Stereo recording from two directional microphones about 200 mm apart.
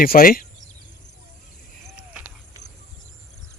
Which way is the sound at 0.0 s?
45° left (ahead or behind).